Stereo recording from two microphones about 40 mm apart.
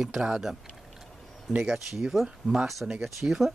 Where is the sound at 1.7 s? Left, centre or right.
Centre.